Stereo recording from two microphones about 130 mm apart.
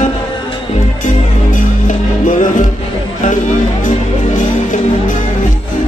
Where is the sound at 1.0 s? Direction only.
90° left.